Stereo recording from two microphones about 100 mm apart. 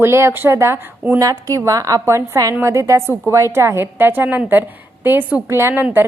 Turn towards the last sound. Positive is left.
turn(degrees=-20)  # may be behind; listen again after turning